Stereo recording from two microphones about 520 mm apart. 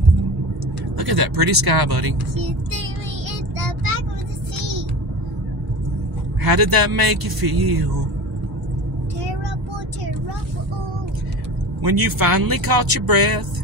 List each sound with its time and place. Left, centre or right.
0.9 s a man's voice: right
6.4 s a man's voice: right
11.8 s speech: right